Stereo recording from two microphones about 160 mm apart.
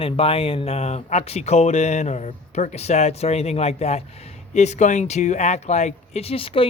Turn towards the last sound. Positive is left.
turn(degrees=35)  # may be behind; listen again after turning